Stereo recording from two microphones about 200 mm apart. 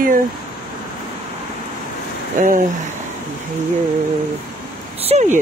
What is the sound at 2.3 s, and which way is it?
Speech, 40° right (ahead or behind).